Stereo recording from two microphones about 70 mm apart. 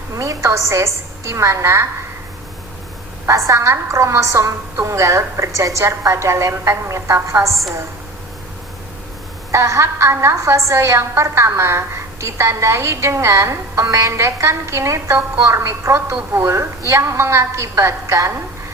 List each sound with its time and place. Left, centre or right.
0.2 s a woman's voice: right
3.2 s a woman's voice: right
9.5 s a woman's voice: right